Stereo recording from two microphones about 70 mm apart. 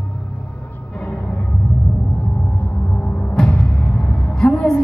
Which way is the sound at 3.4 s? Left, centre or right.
Centre.